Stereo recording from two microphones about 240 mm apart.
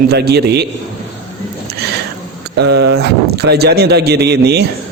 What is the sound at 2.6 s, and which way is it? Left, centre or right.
A man's voice, right.